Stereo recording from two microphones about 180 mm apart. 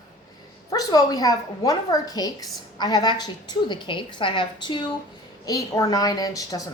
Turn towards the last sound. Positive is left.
turn(degrees=20)  # may be behind; listen again after turning